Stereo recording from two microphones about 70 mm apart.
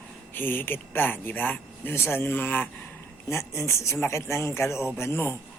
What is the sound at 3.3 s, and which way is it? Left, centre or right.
A man's voice, left.